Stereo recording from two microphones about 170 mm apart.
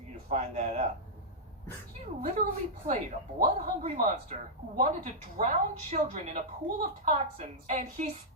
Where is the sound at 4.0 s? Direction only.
50° right (ahead or behind).